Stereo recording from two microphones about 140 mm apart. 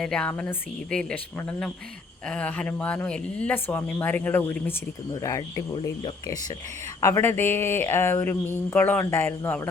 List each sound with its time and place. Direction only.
0.0 s speech: 5° left (ahead or behind)
5.1 s speech: 25° left (ahead or behind)